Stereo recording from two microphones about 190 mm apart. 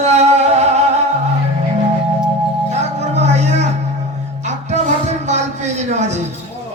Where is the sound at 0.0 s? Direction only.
35° right (ahead or behind).